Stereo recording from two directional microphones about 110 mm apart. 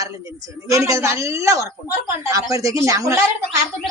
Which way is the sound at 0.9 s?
30° right (ahead or behind).